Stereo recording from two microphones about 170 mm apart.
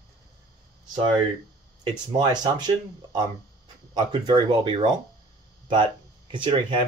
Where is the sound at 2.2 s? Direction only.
25° right (ahead or behind).